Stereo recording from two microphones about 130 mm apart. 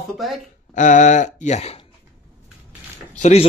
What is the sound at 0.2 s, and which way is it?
Speech, centre (ahead or behind).